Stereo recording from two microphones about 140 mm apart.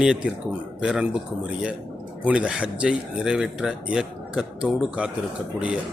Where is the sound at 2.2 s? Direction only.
10° right (ahead or behind).